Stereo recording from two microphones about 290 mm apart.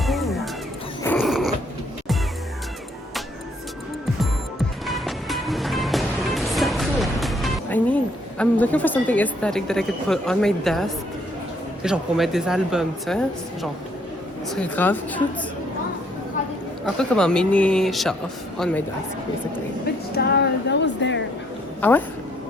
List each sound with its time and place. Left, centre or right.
0.0 s music: centre
1.0 s a sound: centre
4.9 s music: centre
8.4 s speech: centre
17.0 s a woman's voice: centre
20.1 s speech: left
21.8 s speech: centre